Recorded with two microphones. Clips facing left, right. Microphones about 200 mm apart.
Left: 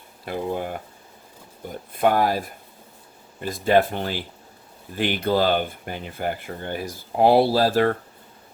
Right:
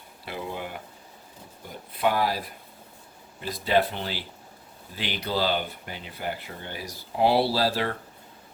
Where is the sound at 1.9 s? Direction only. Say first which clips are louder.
Left 5 dB; 50° left (ahead or behind).